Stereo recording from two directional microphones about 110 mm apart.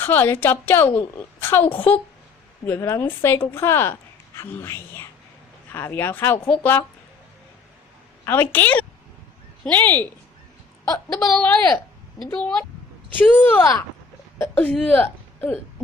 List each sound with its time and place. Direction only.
0.0 s a woman's voice: 20° left (ahead or behind)
2.6 s a woman's voice: 25° left (ahead or behind)
8.2 s a woman's voice: 20° left (ahead or behind)
10.9 s speech: 35° left (ahead or behind)
11.3 s speech: 10° left (ahead or behind)